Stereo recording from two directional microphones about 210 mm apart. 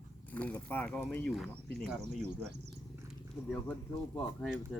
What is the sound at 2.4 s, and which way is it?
Speech, 55° right (ahead or behind).